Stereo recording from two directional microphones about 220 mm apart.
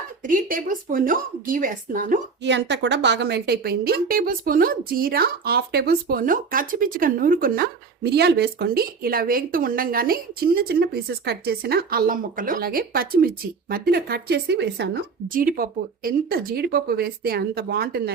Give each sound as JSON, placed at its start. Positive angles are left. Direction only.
{"t": 0.2, "sound": "a woman's voice", "side_deg": -40}
{"t": 2.4, "sound": "speech", "side_deg": -50}